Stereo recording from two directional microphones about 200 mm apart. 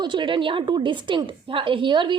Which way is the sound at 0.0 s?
25° right (ahead or behind).